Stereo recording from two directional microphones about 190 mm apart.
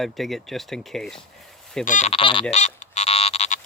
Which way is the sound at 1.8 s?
40° left (ahead or behind).